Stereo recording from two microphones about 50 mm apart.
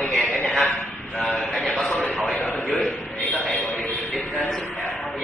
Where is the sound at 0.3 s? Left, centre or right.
Left.